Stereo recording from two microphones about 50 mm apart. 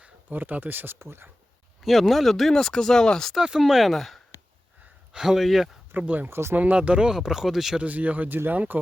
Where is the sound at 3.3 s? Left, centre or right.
Centre.